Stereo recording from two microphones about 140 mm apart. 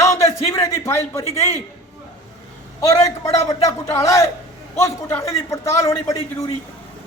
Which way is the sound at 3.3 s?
20° left (ahead or behind).